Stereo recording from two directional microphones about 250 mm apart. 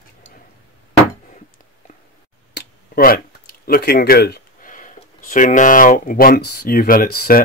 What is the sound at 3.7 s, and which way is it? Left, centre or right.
Speech, left.